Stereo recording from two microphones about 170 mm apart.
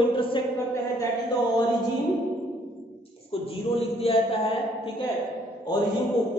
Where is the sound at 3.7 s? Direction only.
35° left (ahead or behind).